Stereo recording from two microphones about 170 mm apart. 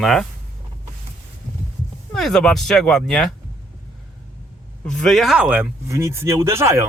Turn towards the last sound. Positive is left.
turn(degrees=-15)  # may be behind; listen again after turning